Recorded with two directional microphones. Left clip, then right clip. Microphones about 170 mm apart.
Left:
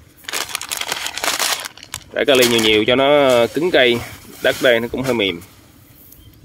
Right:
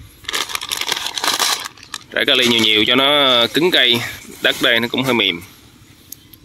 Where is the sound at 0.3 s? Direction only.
35° left (ahead or behind).